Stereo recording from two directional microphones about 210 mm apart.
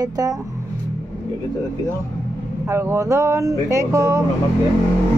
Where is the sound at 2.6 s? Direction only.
10° right (ahead or behind).